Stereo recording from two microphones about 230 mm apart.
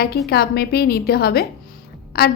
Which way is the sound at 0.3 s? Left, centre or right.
Left.